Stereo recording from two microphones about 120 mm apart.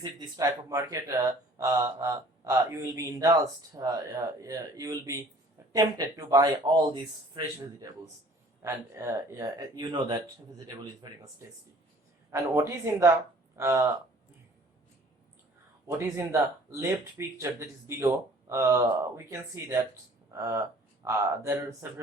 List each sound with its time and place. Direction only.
0.0 s speech: 40° right (ahead or behind)
0.4 s speech: 25° right (ahead or behind)
6.9 s speech: 40° right (ahead or behind)
8.6 s speech: 25° right (ahead or behind)
12.3 s speech: 25° right (ahead or behind)
16.1 s speech: 25° right (ahead or behind)